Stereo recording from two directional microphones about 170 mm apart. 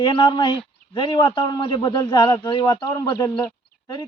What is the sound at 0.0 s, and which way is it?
A man's voice, 30° left (ahead or behind).